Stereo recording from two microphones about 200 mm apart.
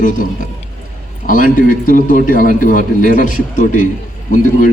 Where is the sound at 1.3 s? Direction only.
45° left (ahead or behind).